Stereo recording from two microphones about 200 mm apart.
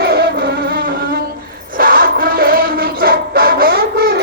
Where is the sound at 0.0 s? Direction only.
50° right (ahead or behind).